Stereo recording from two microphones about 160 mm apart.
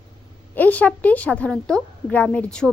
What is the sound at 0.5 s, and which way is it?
A woman's voice, 10° left (ahead or behind).